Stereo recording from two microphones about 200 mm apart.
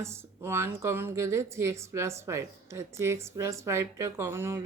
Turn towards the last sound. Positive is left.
turn(degrees=-15)  # may be behind; listen again after turning